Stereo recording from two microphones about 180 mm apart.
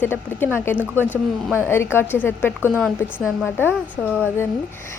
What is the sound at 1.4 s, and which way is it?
Speech, 5° right (ahead or behind).